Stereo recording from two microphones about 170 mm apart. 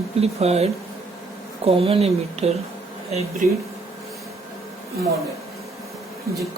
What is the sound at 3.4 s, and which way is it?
Speech, 50° right (ahead or behind).